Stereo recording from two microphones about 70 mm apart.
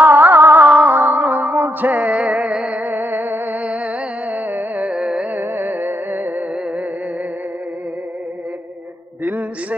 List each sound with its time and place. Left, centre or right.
0.0 s music: right
1.4 s music: right
1.8 s music: right
2.4 s music: centre
2.7 s music: right; by 5.2 s centre
5.3 s music: right
9.2 s a sound: right